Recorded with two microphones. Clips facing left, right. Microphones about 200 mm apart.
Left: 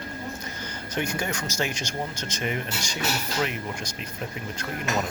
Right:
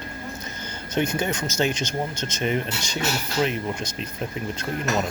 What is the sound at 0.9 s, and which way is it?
Speech, 20° right (ahead or behind).